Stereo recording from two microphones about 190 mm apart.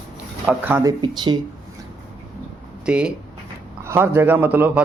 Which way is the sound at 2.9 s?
5° right (ahead or behind).